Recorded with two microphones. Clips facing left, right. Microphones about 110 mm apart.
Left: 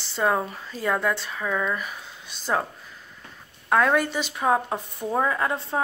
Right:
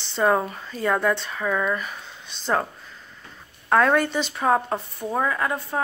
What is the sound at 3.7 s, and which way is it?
Speech, 5° left (ahead or behind).